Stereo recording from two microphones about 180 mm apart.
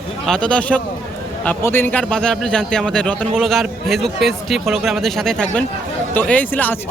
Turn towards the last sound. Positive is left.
turn(degrees=10)  # may be behind; listen again after turning